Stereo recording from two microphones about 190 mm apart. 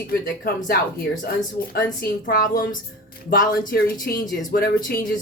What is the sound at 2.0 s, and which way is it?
Speech, 50° left (ahead or behind).